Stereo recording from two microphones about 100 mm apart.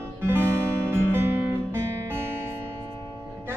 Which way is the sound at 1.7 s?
25° right (ahead or behind).